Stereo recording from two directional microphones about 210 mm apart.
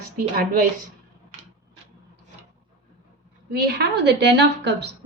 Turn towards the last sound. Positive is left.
turn(degrees=-55)  # may be behind; listen again after turning